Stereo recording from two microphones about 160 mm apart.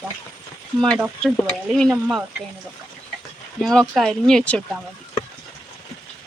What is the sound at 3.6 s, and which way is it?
Speech, centre (ahead or behind).